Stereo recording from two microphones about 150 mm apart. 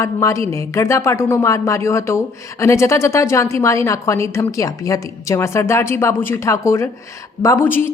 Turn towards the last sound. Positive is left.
turn(degrees=15)  # may be behind; listen again after turning